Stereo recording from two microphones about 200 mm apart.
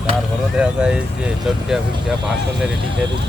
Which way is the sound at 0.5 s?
5° right (ahead or behind).